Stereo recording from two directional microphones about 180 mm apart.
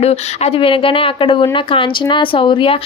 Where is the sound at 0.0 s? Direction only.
35° left (ahead or behind).